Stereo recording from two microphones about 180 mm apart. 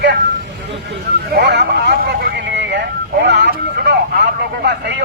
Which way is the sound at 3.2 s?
75° right (ahead or behind).